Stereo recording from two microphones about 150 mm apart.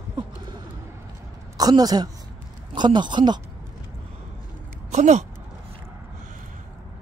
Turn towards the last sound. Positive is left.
turn(degrees=-50)  # may be behind; listen again after turning